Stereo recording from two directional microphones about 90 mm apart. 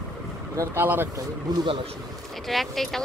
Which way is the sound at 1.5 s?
50° right (ahead or behind).